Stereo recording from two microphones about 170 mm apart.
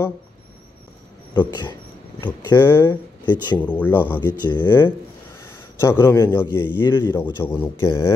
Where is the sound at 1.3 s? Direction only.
25° left (ahead or behind).